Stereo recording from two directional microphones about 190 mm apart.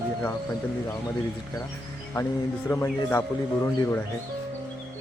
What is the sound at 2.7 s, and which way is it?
Speech, 15° left (ahead or behind).